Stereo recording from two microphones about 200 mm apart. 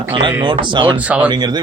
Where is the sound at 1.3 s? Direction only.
20° right (ahead or behind).